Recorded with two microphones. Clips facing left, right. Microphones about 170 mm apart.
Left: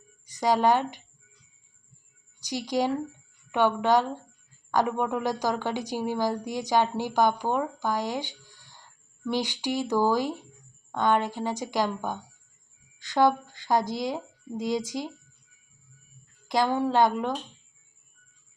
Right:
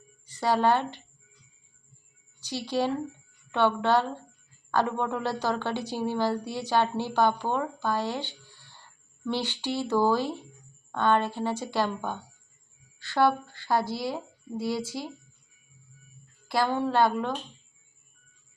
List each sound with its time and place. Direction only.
0.3 s speech: 15° left (ahead or behind)
2.4 s a woman's voice: 15° left (ahead or behind)
16.5 s a woman's voice: 15° left (ahead or behind)